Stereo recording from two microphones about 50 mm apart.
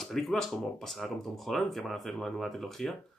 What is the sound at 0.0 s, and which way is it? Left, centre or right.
Speech, centre.